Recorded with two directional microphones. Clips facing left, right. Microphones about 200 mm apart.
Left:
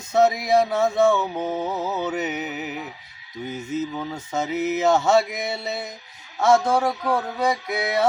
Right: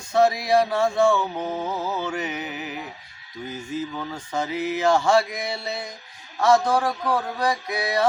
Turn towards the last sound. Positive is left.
turn(degrees=25)  # may be behind; listen again after turning